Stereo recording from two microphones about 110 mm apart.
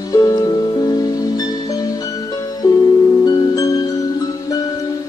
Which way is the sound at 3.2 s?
35° left (ahead or behind).